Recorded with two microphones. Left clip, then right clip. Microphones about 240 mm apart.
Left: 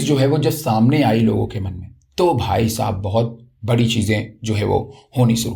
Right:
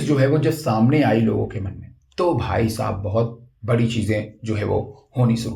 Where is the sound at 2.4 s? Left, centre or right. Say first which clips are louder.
Left 3 dB; left.